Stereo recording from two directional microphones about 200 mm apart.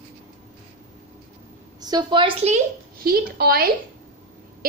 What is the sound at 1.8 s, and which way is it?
Speech, 20° right (ahead or behind).